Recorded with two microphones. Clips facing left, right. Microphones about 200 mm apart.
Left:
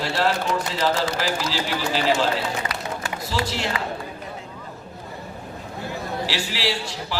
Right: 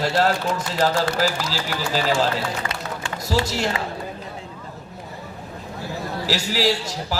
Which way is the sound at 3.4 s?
45° right (ahead or behind).